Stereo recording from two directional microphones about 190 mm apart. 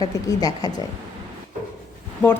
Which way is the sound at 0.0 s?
20° left (ahead or behind).